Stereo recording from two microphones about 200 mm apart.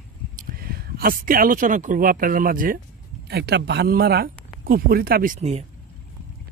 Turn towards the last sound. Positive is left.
turn(degrees=-35)  # may be behind; listen again after turning